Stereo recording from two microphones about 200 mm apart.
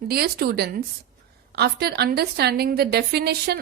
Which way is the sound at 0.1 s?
50° right (ahead or behind).